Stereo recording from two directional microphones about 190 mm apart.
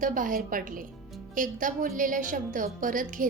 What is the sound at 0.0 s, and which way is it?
A woman's voice, 45° right (ahead or behind).